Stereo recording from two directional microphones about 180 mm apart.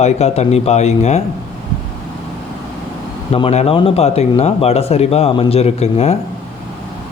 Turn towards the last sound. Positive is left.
turn(degrees=35)  # may be behind; listen again after turning